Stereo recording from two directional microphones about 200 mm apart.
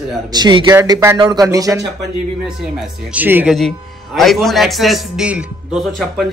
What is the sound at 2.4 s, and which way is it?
A man's voice, 5° right (ahead or behind).